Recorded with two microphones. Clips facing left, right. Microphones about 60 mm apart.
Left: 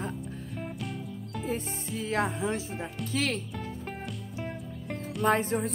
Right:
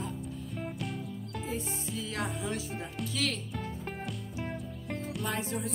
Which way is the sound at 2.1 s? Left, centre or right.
Left.